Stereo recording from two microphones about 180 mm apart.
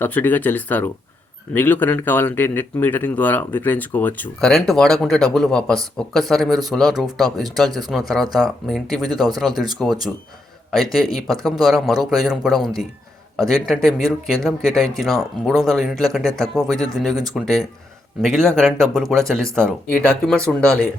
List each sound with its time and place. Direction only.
0.0 s speech: 10° left (ahead or behind)
16.6 s speech: 20° right (ahead or behind)
17.0 s speech: centre (ahead or behind)